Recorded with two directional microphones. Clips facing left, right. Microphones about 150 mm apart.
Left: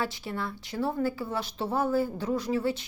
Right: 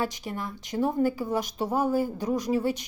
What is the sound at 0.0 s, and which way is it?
Speech, 15° right (ahead or behind).